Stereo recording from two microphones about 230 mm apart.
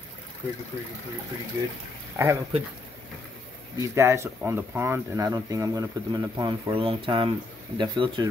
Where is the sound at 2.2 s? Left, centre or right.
Centre.